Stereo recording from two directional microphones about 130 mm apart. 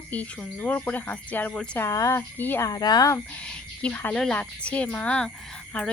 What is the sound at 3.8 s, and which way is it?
Speech, 10° left (ahead or behind).